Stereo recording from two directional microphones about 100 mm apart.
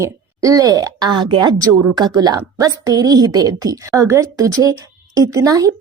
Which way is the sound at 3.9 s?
30° right (ahead or behind).